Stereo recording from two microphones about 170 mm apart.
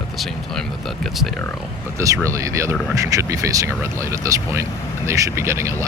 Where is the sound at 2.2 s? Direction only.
20° right (ahead or behind).